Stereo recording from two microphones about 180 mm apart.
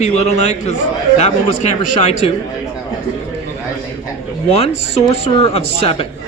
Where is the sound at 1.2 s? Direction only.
35° left (ahead or behind).